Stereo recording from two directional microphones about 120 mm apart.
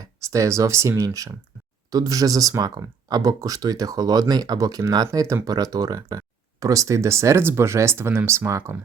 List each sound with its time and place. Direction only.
0.0 s speech: 25° right (ahead or behind)